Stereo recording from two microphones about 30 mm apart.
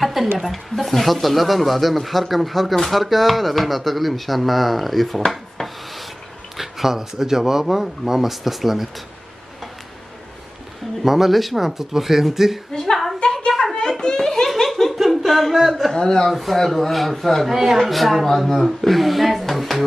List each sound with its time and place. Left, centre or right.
0.0 s speech: centre
5.3 s rub: centre
6.5 s a sound: centre
7.0 s speech: centre
11.0 s speech: centre
12.7 s a woman's voice: centre
14.0 s laughter: centre
14.4 s speech: centre
15.9 s laughter: left
16.3 s speech: centre
17.5 s speech: centre
17.7 s speech: centre